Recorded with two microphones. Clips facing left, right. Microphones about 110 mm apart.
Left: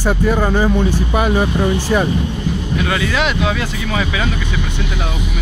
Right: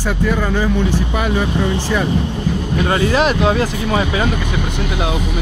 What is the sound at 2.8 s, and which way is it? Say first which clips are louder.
Speech: right 4 dB; 35° right (ahead or behind).